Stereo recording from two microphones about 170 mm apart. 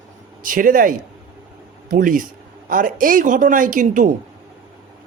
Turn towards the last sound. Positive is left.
turn(degrees=-50)  # may be behind; listen again after turning